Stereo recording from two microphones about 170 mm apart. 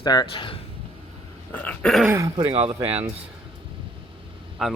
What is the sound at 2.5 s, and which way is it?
Speech, 30° right (ahead or behind).